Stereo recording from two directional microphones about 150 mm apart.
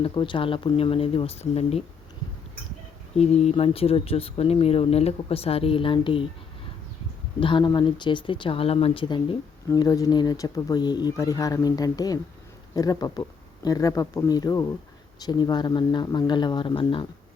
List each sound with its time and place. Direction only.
0.0 s speech: 35° left (ahead or behind)
3.2 s speech: 45° left (ahead or behind)
7.3 s speech: 35° left (ahead or behind)